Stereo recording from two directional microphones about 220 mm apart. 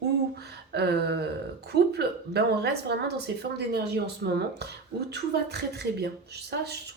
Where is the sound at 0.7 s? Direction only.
50° right (ahead or behind).